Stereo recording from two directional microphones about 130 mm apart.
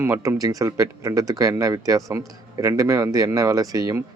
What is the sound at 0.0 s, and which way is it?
Speech, 20° right (ahead or behind).